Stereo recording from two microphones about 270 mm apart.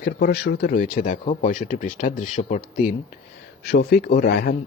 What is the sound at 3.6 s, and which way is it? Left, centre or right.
Speech, left.